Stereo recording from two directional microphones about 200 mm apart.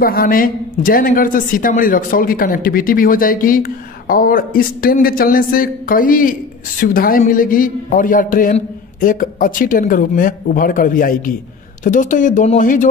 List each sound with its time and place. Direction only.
0.0 s a woman's voice: 45° left (ahead or behind)